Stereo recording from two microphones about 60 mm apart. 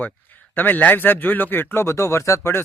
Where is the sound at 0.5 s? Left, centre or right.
Left.